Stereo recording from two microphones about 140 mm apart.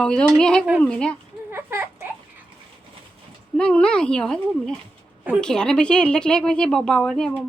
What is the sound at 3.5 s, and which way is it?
Speech, 5° left (ahead or behind).